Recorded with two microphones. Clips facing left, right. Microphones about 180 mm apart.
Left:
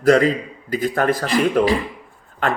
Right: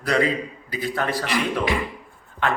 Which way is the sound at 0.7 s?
45° left (ahead or behind).